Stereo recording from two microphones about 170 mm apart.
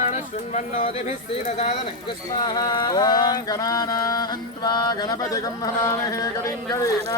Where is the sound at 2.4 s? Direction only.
25° left (ahead or behind).